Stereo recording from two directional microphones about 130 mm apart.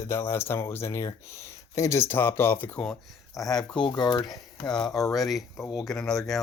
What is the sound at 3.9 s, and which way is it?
Speech, 35° left (ahead or behind).